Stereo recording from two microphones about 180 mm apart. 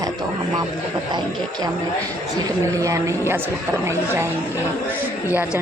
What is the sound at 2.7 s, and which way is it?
Speech, 20° right (ahead or behind).